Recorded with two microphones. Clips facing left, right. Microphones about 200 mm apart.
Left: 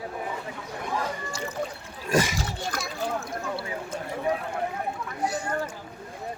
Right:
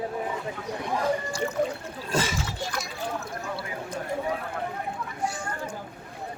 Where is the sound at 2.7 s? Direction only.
40° left (ahead or behind).